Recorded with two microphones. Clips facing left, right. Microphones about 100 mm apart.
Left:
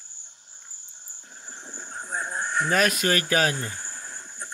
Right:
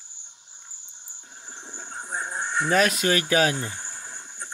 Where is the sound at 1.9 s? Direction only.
20° right (ahead or behind).